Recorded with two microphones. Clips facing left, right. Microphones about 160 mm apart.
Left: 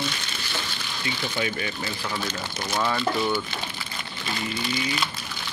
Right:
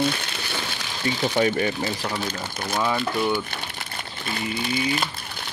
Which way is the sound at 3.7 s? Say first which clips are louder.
Right 1 dB; 55° right (ahead or behind).